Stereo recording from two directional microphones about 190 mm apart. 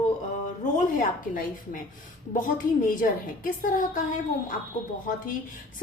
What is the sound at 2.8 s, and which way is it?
A woman's voice, 45° left (ahead or behind).